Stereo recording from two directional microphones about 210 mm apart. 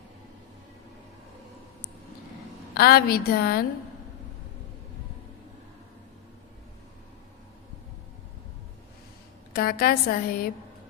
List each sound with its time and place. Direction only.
2.7 s a woman's voice: 45° left (ahead or behind)
9.5 s a woman's voice: 45° left (ahead or behind)